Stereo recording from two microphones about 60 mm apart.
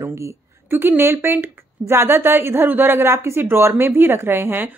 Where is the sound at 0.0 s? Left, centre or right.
Right.